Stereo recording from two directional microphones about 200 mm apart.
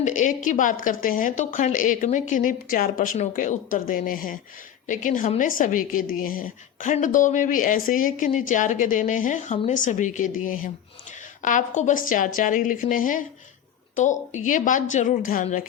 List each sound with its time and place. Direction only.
0.0 s speech: 40° left (ahead or behind)